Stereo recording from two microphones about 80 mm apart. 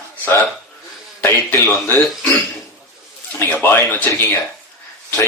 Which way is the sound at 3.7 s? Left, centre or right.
Left.